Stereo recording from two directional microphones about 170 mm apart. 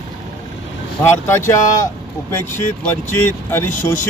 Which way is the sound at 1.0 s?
15° left (ahead or behind).